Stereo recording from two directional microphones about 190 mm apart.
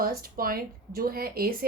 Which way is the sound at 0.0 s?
50° right (ahead or behind).